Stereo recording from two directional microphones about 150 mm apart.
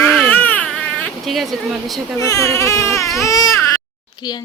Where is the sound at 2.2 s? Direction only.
20° left (ahead or behind).